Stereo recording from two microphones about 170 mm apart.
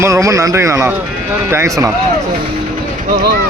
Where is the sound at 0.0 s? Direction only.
20° right (ahead or behind).